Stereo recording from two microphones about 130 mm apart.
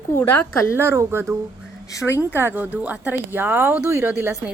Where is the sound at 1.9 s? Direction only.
25° left (ahead or behind).